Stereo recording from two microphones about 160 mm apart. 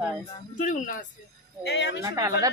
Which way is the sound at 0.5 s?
55° left (ahead or behind).